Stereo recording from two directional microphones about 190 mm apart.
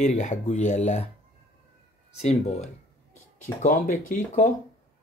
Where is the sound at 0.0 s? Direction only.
40° left (ahead or behind).